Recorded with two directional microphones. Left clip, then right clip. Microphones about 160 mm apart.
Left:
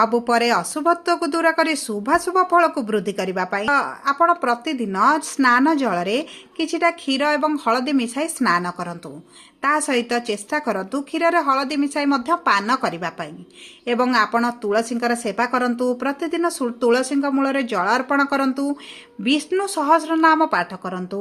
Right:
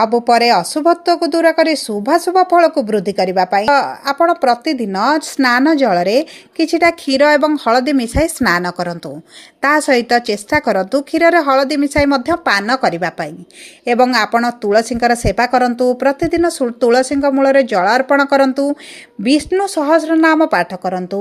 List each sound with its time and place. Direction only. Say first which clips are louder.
0.0 s speech: right 6 dB; 25° right (ahead or behind)